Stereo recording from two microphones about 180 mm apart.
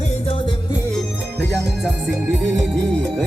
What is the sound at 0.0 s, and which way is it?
Music, 35° left (ahead or behind).